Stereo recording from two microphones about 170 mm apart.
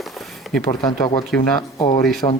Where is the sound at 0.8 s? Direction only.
25° left (ahead or behind).